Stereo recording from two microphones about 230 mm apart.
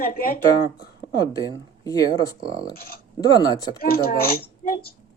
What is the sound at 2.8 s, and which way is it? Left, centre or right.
A child's voice, left.